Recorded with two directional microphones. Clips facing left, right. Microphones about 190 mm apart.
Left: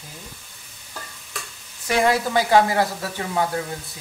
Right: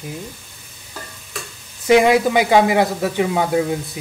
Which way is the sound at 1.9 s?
20° right (ahead or behind).